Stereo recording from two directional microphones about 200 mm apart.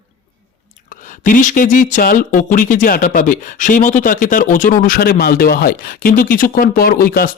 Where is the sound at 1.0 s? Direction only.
40° left (ahead or behind).